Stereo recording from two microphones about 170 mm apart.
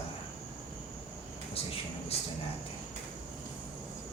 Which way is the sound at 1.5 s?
35° left (ahead or behind).